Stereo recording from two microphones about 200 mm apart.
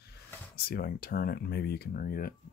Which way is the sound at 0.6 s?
50° left (ahead or behind).